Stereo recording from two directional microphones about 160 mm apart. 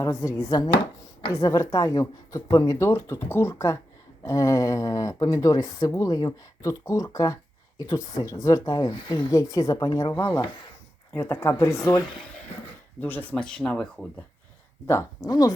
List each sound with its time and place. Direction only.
0.0 s speech: 20° left (ahead or behind); by 14.1 s 5° left (ahead or behind)
14.8 s speech: 20° left (ahead or behind)